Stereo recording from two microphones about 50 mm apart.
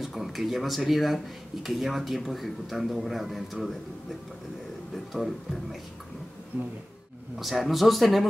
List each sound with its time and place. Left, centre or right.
0.0 s speech: centre
4.9 s speech: centre
6.5 s a sound: right
7.3 s speech: centre